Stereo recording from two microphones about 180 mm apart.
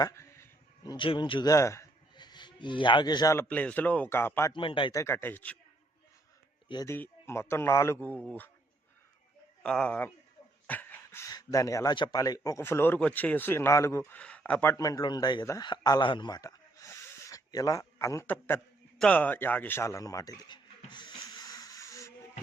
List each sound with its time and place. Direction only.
0.0 s a sound: 15° left (ahead or behind)
0.9 s speech: 30° left (ahead or behind)
3.4 s speech: 10° left (ahead or behind)
4.5 s speech: 30° left (ahead or behind)
4.9 s speech: 15° left (ahead or behind)
6.7 s speech: 25° left (ahead or behind)
6.9 s speech: 15° left (ahead or behind)
9.6 s speech: 5° left (ahead or behind)